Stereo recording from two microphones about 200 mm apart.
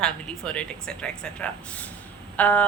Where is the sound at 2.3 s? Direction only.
10° left (ahead or behind).